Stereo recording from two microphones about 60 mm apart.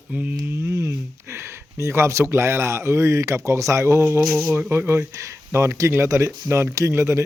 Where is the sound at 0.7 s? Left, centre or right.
Right.